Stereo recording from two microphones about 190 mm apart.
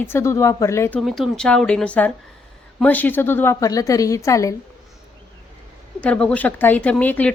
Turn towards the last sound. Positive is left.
turn(degrees=10)  # may be behind; listen again after turning